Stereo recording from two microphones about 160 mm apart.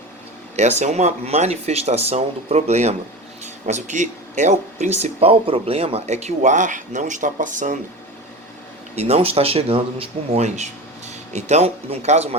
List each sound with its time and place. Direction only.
0.5 s speech: 45° right (ahead or behind)
9.0 s speech: 40° right (ahead or behind)